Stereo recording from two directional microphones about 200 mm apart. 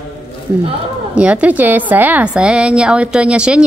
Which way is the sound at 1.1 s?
5° right (ahead or behind).